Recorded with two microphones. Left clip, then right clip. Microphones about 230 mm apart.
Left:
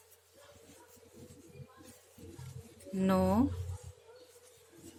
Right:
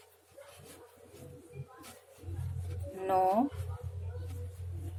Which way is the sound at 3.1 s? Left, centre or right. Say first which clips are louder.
Right 4 dB; left.